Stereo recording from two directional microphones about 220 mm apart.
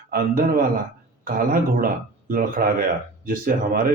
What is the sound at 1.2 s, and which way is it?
Speech, 40° right (ahead or behind).